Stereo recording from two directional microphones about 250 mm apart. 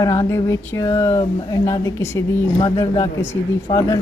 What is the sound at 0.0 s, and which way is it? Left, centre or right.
Speech, centre.